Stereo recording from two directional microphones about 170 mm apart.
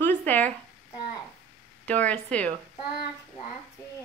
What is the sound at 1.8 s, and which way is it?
Speech, 10° left (ahead or behind).